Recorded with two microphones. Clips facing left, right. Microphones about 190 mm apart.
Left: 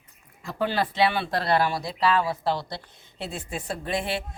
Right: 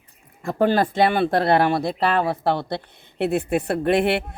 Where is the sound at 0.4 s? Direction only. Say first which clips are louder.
Right 7 dB; 50° right (ahead or behind).